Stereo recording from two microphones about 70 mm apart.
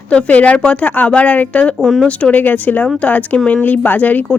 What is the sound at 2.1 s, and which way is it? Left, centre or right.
A woman's voice, centre.